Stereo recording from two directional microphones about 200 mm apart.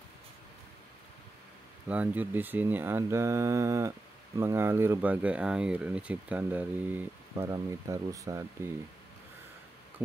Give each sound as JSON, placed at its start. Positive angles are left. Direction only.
{"t": 1.9, "sound": "speech", "side_deg": -10}